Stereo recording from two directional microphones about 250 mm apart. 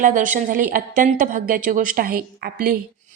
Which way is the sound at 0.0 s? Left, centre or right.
Right.